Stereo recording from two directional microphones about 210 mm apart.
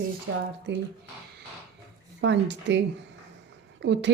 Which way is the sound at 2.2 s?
55° right (ahead or behind).